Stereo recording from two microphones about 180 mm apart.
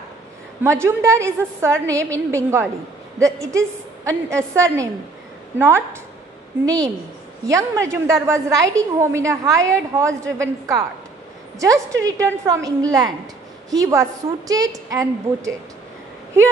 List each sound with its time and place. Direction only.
0.7 s a woman's voice: 15° right (ahead or behind)